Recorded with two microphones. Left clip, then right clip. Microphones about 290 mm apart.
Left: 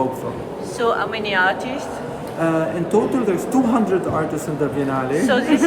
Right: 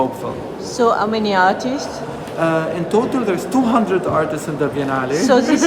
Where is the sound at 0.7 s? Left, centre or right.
Centre.